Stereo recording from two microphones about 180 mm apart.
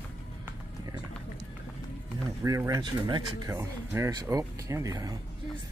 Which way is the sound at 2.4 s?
20° right (ahead or behind).